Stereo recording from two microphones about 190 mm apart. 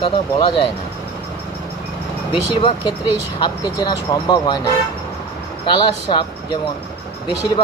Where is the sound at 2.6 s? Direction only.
25° left (ahead or behind).